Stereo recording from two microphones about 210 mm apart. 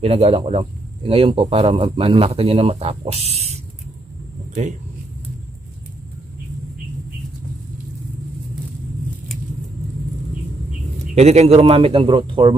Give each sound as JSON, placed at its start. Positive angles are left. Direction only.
{"t": 0.0, "sound": "speech", "side_deg": -30}
{"t": 11.1, "sound": "speech", "side_deg": -30}